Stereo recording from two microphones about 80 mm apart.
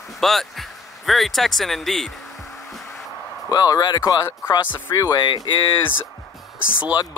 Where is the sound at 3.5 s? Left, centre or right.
Left.